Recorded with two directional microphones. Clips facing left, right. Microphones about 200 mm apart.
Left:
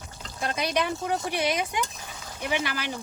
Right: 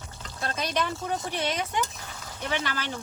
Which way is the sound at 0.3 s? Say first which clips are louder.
Left 2 dB; 10° left (ahead or behind).